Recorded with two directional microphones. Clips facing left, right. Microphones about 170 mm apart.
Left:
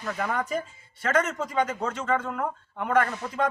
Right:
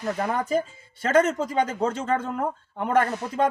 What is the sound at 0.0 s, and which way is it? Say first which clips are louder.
A man's voice: right 3 dB; 35° right (ahead or behind).